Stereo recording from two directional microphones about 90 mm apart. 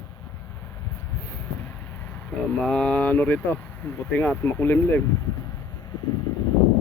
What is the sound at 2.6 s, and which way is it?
Speech, 10° left (ahead or behind).